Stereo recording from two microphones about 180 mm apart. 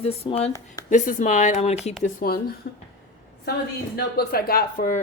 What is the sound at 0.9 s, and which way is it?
Speech, 45° left (ahead or behind).